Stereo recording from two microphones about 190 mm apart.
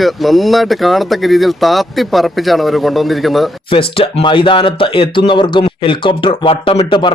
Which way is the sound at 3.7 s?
30° left (ahead or behind).